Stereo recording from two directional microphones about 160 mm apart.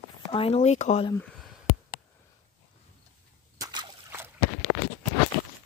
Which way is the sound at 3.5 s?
20° right (ahead or behind).